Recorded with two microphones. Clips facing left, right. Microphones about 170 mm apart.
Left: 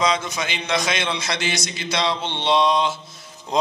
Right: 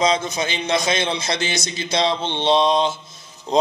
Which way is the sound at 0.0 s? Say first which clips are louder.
Right 3 dB; 25° right (ahead or behind).